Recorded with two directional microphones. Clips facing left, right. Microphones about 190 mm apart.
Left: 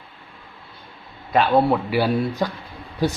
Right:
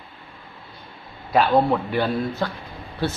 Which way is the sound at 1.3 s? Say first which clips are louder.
Left 1 dB; 5° left (ahead or behind).